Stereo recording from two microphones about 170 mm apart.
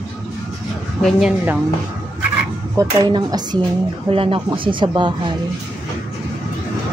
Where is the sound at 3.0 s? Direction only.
25° right (ahead or behind).